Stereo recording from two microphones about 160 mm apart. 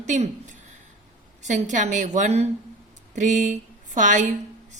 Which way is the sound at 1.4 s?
45° right (ahead or behind).